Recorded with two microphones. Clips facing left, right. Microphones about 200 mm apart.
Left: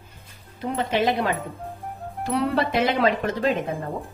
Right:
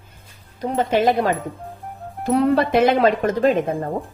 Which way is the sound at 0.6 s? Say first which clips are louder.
Right 5 dB; 40° right (ahead or behind).